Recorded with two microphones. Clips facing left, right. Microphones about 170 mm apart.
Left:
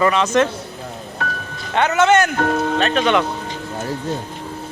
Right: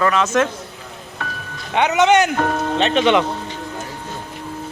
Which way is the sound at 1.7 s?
15° right (ahead or behind).